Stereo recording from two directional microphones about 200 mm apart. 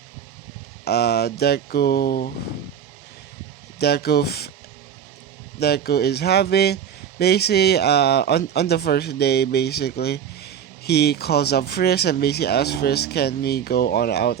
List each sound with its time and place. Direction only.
0.9 s speech: 55° left (ahead or behind)
3.8 s speech: 55° left (ahead or behind)
5.5 s speech: 55° left (ahead or behind)